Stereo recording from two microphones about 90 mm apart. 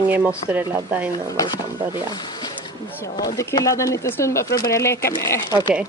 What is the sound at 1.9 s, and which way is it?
Speech, 55° left (ahead or behind).